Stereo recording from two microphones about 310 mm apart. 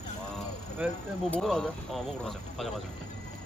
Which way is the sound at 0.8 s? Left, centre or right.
Centre.